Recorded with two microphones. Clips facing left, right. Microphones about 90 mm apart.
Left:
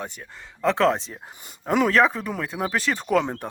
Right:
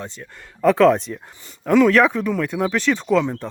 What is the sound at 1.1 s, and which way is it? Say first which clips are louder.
Speech: right 6 dB; 20° left (ahead or behind).